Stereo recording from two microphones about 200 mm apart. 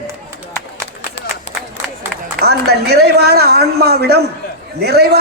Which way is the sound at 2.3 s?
55° right (ahead or behind).